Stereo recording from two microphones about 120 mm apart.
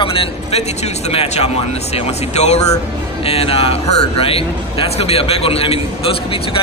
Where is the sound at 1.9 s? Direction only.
65° left (ahead or behind).